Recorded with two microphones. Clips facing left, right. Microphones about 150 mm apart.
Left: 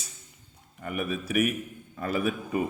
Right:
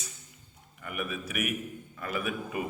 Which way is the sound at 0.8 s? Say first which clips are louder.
Left 5 dB; 35° left (ahead or behind).